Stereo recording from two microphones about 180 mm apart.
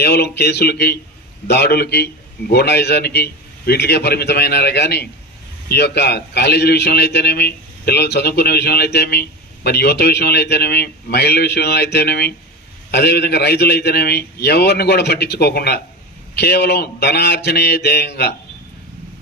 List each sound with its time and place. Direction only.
0.0 s a man's voice: 65° left (ahead or behind)